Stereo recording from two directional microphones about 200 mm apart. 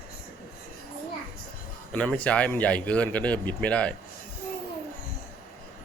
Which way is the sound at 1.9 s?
5° left (ahead or behind).